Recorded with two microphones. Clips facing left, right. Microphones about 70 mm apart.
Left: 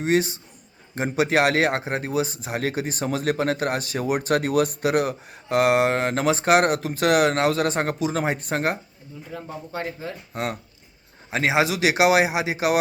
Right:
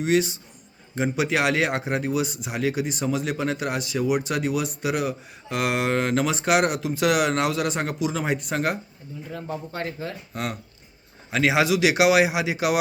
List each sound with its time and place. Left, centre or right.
0.0 s speech: left
9.3 s speech: centre
10.3 s a man's voice: left